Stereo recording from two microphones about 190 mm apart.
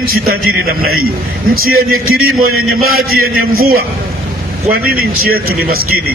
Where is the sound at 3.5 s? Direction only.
50° right (ahead or behind).